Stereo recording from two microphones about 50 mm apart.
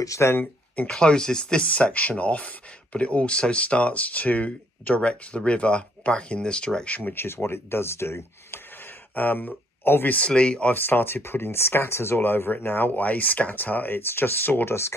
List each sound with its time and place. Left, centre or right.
0.0 s speech: left
0.8 s speech: centre
7.2 s speech: left
9.1 s speech: left
9.8 s speech: left
10.1 s speech: left
10.7 s speech: left